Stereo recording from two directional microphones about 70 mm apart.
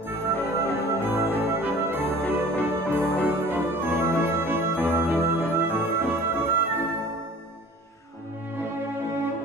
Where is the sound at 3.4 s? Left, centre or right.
Right.